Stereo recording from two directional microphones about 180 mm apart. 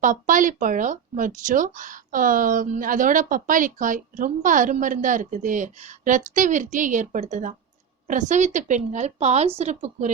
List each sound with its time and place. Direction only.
0.0 s a woman's voice: 45° right (ahead or behind)